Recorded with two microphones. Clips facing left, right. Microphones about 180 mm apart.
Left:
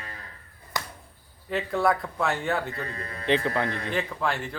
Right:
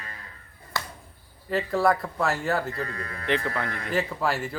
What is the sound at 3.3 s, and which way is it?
Speech, 20° left (ahead or behind).